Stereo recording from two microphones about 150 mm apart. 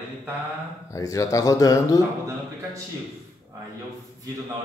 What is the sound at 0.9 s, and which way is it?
Speech, 25° left (ahead or behind).